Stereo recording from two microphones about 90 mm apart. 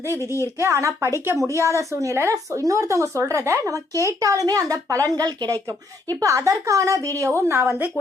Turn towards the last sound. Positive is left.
turn(degrees=-25)  # may be behind; listen again after turning